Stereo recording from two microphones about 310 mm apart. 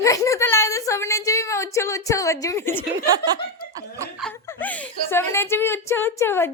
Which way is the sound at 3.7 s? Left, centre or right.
Centre.